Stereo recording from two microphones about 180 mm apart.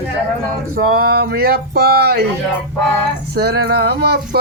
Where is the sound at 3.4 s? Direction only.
60° right (ahead or behind).